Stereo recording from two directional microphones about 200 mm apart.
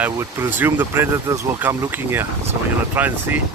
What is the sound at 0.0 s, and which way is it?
Speech, 10° right (ahead or behind).